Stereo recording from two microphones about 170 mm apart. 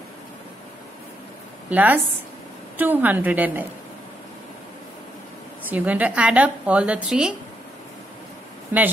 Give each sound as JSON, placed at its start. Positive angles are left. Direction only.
{"t": 1.7, "sound": "a woman's voice", "side_deg": -10}
{"t": 5.7, "sound": "a woman's voice", "side_deg": -10}